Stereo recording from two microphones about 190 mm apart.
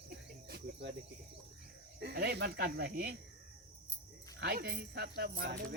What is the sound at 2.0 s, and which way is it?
Speech, 60° right (ahead or behind).